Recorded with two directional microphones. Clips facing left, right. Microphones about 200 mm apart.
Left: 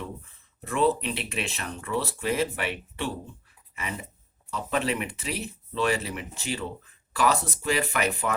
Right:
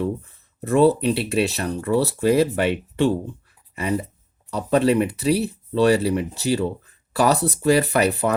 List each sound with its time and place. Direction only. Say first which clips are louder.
0.6 s speech: right 8 dB; 40° right (ahead or behind)
3.8 s speech: right 12 dB; 35° right (ahead or behind)